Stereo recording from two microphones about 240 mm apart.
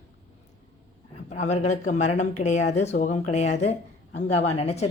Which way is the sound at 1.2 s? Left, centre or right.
Left.